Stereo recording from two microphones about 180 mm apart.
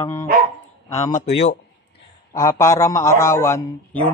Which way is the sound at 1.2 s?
80° left.